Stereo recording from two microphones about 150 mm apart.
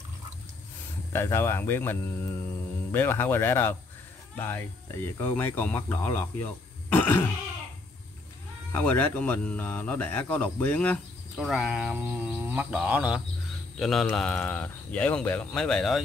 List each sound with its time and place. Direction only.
1.1 s speech: 15° left (ahead or behind)
8.7 s speech: 10° left (ahead or behind)
11.3 s speech: centre (ahead or behind)
13.7 s speech: centre (ahead or behind)